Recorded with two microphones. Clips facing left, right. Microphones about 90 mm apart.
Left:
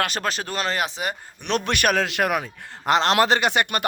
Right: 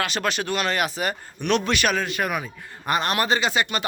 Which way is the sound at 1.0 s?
20° left (ahead or behind).